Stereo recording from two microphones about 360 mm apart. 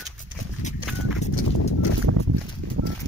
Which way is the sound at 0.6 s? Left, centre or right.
Centre.